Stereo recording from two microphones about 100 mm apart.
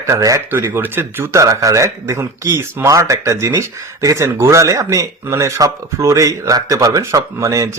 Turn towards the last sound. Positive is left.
turn(degrees=-35)  # may be behind; listen again after turning